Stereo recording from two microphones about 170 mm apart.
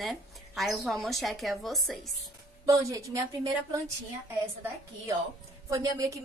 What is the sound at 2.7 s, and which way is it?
A woman's voice, 20° right (ahead or behind).